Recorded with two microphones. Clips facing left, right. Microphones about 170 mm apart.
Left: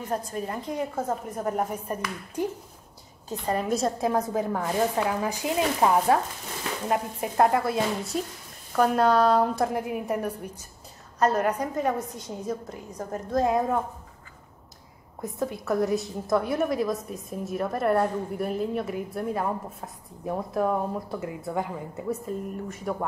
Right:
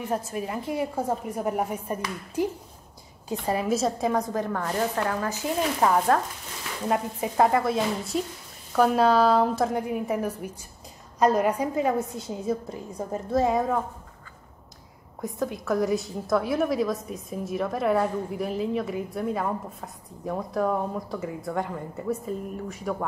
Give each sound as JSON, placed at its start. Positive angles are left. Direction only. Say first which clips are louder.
{"t": 0.0, "sound": "a woman's voice", "louder": "right 1 dB", "side_deg": -5}
{"t": 15.2, "sound": "a woman's voice", "louder": "right 1 dB", "side_deg": 0}